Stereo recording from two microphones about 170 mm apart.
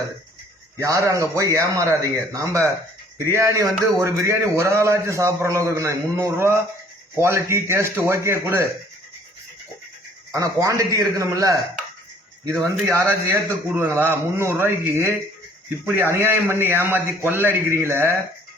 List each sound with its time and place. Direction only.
0.8 s a man's voice: 20° right (ahead or behind)
10.3 s a man's voice: 20° right (ahead or behind)
12.8 s a man's voice: 15° right (ahead or behind)